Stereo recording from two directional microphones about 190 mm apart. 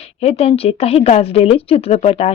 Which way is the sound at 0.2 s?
35° left (ahead or behind).